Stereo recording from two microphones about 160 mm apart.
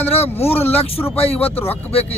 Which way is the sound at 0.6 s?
10° left (ahead or behind).